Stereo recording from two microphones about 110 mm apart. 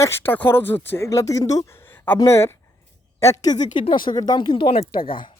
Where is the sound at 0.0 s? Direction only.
20° left (ahead or behind).